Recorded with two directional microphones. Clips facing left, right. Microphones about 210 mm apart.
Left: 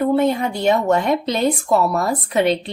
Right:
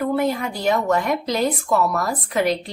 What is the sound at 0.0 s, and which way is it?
Speech, 25° left (ahead or behind).